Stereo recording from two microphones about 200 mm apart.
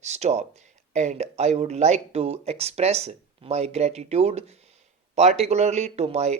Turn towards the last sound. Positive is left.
turn(degrees=-35)  # may be behind; listen again after turning